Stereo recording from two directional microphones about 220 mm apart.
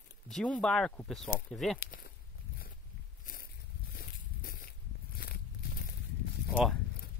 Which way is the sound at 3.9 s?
40° left (ahead or behind).